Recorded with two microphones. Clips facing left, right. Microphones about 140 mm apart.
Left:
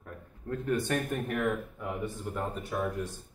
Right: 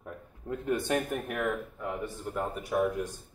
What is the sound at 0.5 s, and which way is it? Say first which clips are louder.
Speech: right 1 dB; 15° right (ahead or behind).